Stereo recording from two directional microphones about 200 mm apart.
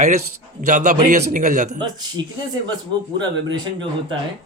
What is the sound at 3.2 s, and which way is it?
Speech, 20° right (ahead or behind).